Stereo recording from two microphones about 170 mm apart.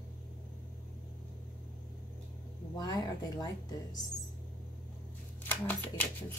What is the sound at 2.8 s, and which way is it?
Speech, 25° left (ahead or behind).